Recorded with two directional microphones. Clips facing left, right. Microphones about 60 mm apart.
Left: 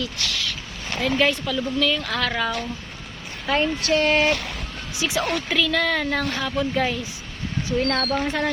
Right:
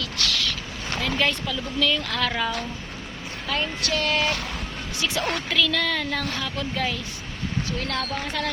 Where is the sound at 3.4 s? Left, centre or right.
Left.